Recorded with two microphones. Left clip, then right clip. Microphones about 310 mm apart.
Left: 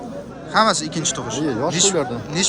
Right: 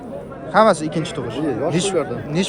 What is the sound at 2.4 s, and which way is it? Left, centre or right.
Speech, centre.